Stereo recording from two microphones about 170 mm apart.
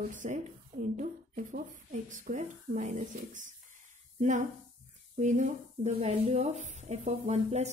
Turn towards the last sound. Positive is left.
turn(degrees=-40)  # may be behind; listen again after turning